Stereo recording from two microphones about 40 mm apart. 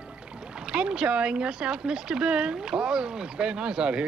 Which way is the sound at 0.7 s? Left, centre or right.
Right.